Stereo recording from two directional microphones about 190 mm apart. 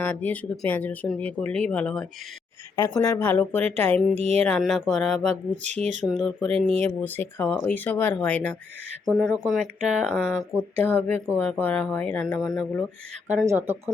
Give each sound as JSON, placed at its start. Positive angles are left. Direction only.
{"t": 0.0, "sound": "speech", "side_deg": 10}
{"t": 4.2, "sound": "speech", "side_deg": -35}
{"t": 4.4, "sound": "speech", "side_deg": 0}
{"t": 5.8, "sound": "speech", "side_deg": -40}
{"t": 6.1, "sound": "speech", "side_deg": 0}
{"t": 10.8, "sound": "speech", "side_deg": 10}
{"t": 13.2, "sound": "speech", "side_deg": -15}